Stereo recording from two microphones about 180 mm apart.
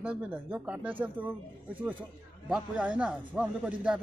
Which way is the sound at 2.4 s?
5° right (ahead or behind).